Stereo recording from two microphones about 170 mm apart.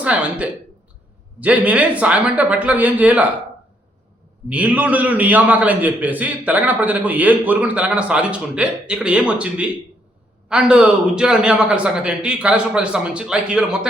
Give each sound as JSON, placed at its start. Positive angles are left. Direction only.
{"t": 0.0, "sound": "a man's voice", "side_deg": -5}
{"t": 4.4, "sound": "a man's voice", "side_deg": -10}